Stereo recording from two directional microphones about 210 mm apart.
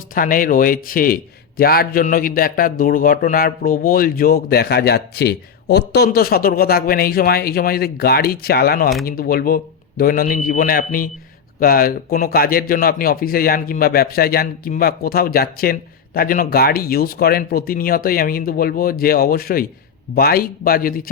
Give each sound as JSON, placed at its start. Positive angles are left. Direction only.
{"t": 0.1, "sound": "a man's voice", "side_deg": 40}